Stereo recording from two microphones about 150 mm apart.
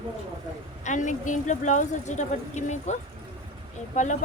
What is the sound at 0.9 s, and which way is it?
A woman's voice, 55° left (ahead or behind).